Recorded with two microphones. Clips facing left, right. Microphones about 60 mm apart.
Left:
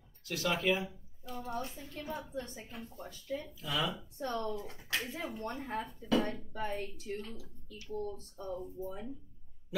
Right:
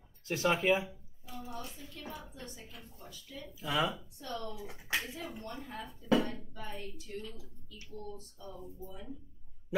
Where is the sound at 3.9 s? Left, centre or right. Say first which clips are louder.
Left 4 dB; left.